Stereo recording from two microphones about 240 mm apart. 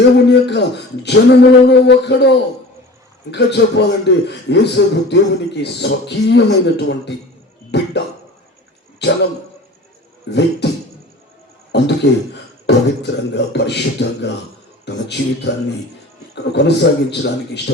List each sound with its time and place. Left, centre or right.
0.3 s a man's voice: left
9.0 s a man's voice: left
10.3 s a man's voice: left
10.6 s beatboxing: left
11.7 s a man's voice: left